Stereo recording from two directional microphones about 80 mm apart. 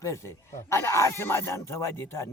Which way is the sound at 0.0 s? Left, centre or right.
Left.